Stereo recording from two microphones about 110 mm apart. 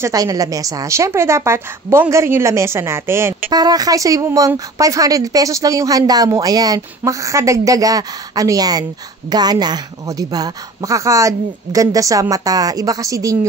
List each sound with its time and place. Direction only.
0.0 s a woman's voice: 35° right (ahead or behind)
3.5 s speech: 35° right (ahead or behind)